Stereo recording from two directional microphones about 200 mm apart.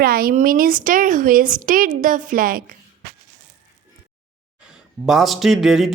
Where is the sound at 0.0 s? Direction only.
45° right (ahead or behind).